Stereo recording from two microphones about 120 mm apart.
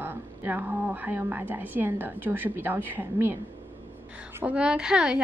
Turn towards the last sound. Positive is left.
turn(degrees=-5)  # may be behind; listen again after turning